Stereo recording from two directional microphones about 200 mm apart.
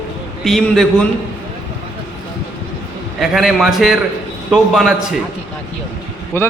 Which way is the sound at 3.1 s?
Centre (ahead or behind).